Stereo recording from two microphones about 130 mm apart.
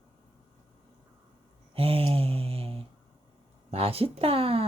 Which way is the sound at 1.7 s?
50° right (ahead or behind).